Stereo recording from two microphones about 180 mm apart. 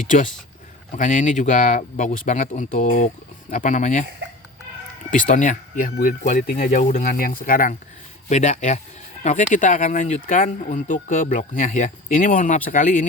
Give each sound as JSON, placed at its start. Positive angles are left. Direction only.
{"t": 0.9, "sound": "speech", "side_deg": 40}
{"t": 5.1, "sound": "speech", "side_deg": 45}
{"t": 8.3, "sound": "speech", "side_deg": 40}